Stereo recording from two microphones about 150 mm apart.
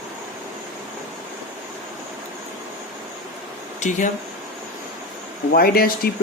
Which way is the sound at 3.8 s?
50° left (ahead or behind).